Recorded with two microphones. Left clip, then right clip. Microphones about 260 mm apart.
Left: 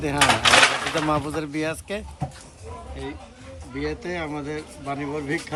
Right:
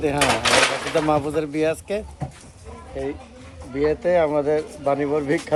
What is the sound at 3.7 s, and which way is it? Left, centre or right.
Speech, right.